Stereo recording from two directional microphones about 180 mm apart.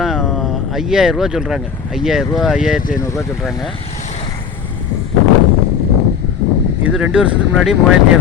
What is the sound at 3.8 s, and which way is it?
Vehicle, 35° left (ahead or behind).